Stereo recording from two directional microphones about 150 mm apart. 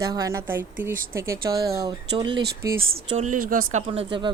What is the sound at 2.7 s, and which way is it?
Speech, 80° right.